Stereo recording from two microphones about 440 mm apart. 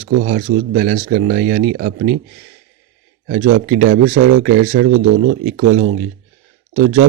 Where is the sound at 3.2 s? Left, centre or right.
Centre.